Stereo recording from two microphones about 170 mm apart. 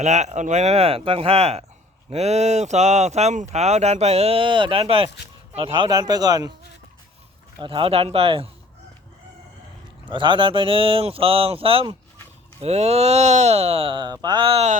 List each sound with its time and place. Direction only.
0.0 s speech: 45° right (ahead or behind); by 6.5 s 25° right (ahead or behind)
7.6 s speech: 30° right (ahead or behind)
10.1 s speech: 30° right (ahead or behind)